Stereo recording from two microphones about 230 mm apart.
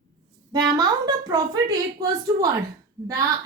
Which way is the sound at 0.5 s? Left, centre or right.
Centre.